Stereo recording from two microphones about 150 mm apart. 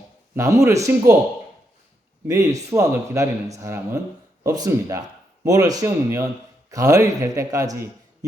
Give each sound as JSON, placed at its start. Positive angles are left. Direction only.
{"t": 0.3, "sound": "speech", "side_deg": -20}
{"t": 2.2, "sound": "speech", "side_deg": -20}